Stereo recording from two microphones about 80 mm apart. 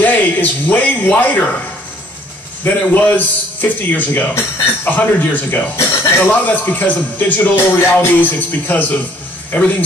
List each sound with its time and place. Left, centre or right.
0.0 s speech: left
2.6 s speech: left
5.8 s speech: left